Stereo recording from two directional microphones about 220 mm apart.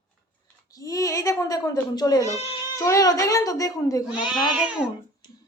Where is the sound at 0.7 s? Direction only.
15° left (ahead or behind).